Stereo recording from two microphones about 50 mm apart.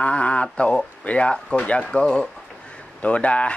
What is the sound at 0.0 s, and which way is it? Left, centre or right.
Speech, left.